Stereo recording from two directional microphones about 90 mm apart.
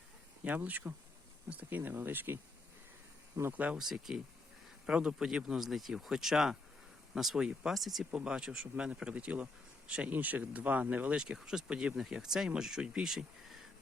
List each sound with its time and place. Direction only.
0.4 s speech: 20° right (ahead or behind)
3.3 s speech: 45° right (ahead or behind)
3.8 s speech: 5° right (ahead or behind)